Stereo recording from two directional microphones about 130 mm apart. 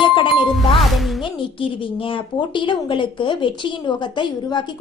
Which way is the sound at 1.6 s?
40° left (ahead or behind).